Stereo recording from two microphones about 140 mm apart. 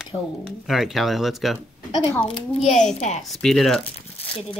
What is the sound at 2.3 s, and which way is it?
Speech, 40° left (ahead or behind).